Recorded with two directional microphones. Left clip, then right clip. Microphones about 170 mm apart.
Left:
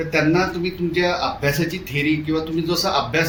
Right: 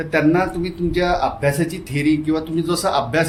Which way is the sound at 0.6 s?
75° right (ahead or behind).